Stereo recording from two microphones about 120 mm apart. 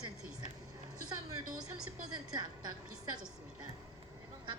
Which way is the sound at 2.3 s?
35° right (ahead or behind).